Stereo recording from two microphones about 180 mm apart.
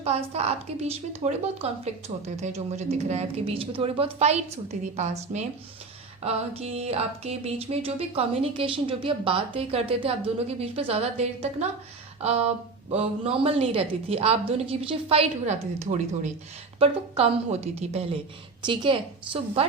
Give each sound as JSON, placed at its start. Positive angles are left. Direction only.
{"t": 0.0, "sound": "a woman's voice", "side_deg": -35}